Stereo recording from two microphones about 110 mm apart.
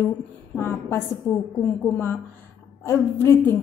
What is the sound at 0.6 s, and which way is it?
A woman's voice, 20° left (ahead or behind).